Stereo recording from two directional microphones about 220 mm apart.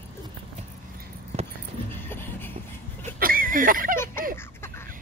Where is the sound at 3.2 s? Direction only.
40° right (ahead or behind).